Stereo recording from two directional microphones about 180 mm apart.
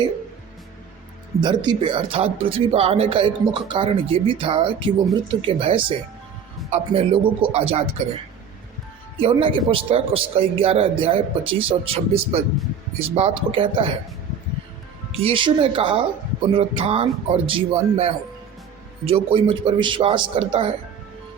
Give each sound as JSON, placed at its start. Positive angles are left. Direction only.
{"t": 1.4, "sound": "a man's voice", "side_deg": -25}
{"t": 9.2, "sound": "a man's voice", "side_deg": -30}
{"t": 15.1, "sound": "a man's voice", "side_deg": -30}